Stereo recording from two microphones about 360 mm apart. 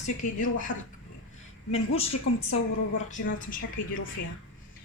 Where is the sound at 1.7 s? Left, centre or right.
Centre.